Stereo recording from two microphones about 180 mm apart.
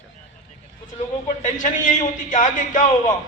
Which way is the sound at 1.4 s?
45° left (ahead or behind).